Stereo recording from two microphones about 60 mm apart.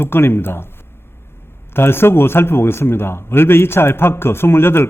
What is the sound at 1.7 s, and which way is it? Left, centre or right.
A man's voice, left.